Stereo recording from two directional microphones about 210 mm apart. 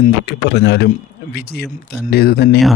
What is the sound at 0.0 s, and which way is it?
Speech, 50° left (ahead or behind).